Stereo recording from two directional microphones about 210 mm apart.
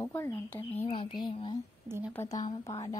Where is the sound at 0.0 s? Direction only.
10° left (ahead or behind).